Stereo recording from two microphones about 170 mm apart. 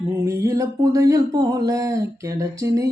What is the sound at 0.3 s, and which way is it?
Speech, 20° right (ahead or behind).